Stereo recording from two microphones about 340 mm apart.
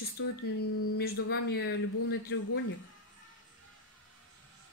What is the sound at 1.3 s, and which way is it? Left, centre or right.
A woman's voice, left.